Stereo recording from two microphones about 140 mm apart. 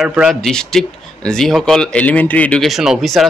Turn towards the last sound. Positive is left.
turn(degrees=0)  # may be behind; listen again after turning